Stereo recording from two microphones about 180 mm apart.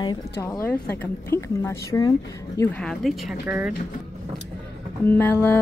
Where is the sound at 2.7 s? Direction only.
Centre (ahead or behind).